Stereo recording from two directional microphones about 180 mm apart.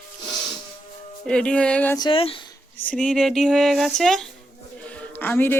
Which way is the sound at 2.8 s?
5° left (ahead or behind).